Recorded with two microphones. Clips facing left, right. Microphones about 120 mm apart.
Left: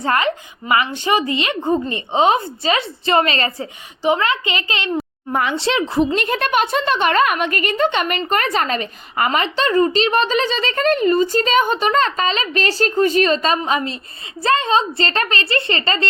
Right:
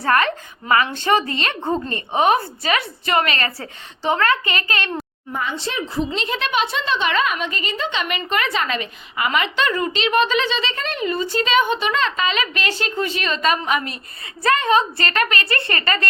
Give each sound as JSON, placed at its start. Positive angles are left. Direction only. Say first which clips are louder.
{"t": 0.0, "sound": "a woman's voice", "louder": "even", "side_deg": 20}
{"t": 4.0, "sound": "a woman's voice", "louder": "left 1 dB", "side_deg": 15}
{"t": 5.3, "sound": "a woman's voice", "louder": "left 7 dB", "side_deg": 75}
{"t": 6.1, "sound": "a woman's voice", "louder": "left 4 dB", "side_deg": 50}